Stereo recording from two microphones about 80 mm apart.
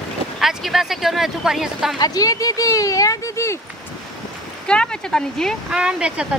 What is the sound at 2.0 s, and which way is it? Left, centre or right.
Speech, left.